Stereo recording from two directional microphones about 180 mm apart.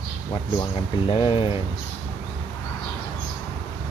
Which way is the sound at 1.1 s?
30° left (ahead or behind).